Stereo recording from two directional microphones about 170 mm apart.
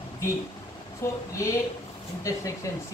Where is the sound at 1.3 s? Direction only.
20° left (ahead or behind).